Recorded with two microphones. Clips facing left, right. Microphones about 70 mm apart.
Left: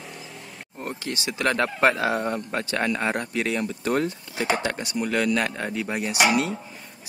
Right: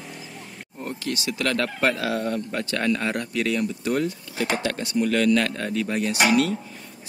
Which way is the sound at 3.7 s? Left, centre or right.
Left.